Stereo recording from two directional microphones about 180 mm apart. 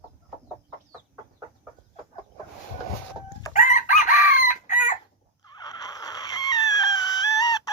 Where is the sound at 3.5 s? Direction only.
45° left (ahead or behind).